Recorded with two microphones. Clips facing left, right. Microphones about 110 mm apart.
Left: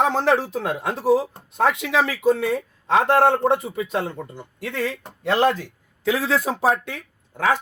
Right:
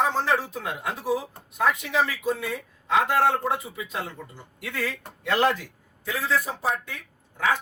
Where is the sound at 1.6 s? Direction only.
90° left.